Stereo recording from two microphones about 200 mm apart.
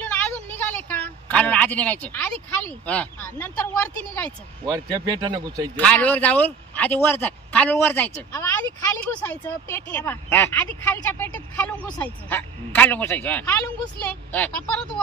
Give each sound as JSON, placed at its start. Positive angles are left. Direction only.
{"t": 0.0, "sound": "a woman's voice", "side_deg": 5}
{"t": 4.6, "sound": "speech", "side_deg": -20}
{"t": 5.8, "sound": "a woman's voice", "side_deg": 5}